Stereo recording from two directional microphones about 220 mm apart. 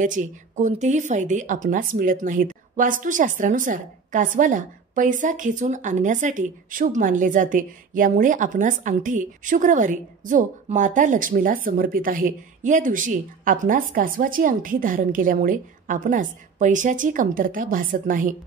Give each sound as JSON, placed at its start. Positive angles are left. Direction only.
{"t": 0.0, "sound": "speech", "side_deg": -35}